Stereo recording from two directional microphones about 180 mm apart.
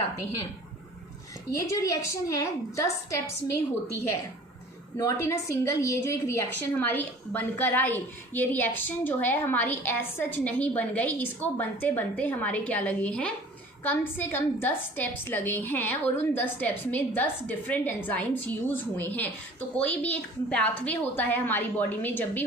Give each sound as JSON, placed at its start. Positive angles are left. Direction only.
{"t": 1.5, "sound": "a woman's voice", "side_deg": 20}
{"t": 4.9, "sound": "a woman's voice", "side_deg": 15}